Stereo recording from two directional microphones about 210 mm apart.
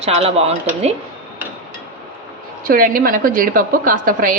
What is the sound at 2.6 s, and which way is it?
A woman's voice, 45° right (ahead or behind).